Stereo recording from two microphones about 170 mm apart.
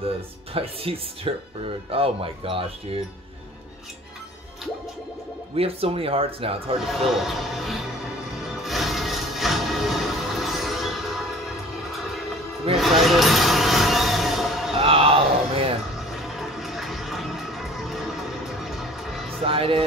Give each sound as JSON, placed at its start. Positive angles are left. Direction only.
{"t": 0.6, "sound": "speech", "side_deg": -35}
{"t": 5.6, "sound": "speech", "side_deg": -35}
{"t": 6.9, "sound": "speech", "side_deg": 0}
{"t": 8.6, "sound": "music", "side_deg": 0}
{"t": 12.7, "sound": "a sound", "side_deg": 0}
{"t": 14.8, "sound": "a sound", "side_deg": -35}
{"t": 16.1, "sound": "music", "side_deg": 0}
{"t": 19.4, "sound": "speech", "side_deg": -30}